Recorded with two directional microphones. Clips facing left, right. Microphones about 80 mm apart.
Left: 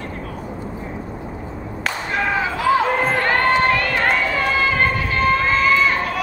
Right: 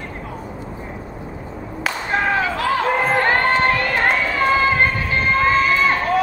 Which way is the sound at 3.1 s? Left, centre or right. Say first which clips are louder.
Right 1 dB; right.